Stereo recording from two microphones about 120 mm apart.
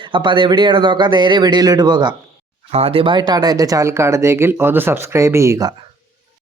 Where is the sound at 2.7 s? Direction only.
55° right (ahead or behind); by 5.7 s 25° right (ahead or behind).